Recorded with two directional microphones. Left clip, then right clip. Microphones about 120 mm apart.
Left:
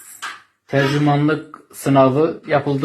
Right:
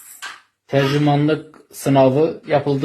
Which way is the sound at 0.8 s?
30° right (ahead or behind).